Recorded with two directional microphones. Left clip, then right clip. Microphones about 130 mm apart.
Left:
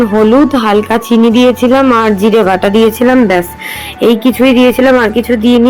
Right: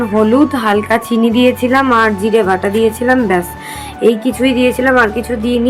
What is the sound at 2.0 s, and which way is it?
Speech, 55° left (ahead or behind).